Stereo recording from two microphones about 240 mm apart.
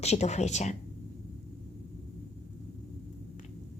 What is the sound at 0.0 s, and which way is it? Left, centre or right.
Speech, left.